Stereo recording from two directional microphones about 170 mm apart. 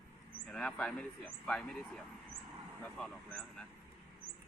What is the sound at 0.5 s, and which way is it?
Speech, 5° left (ahead or behind).